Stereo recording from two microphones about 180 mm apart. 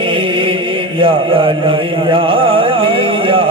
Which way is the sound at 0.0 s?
30° right (ahead or behind).